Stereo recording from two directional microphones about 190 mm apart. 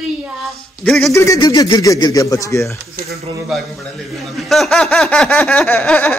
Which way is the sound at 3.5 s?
Centre (ahead or behind).